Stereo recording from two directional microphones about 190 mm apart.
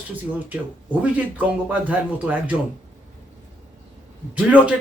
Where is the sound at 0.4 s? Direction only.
10° right (ahead or behind).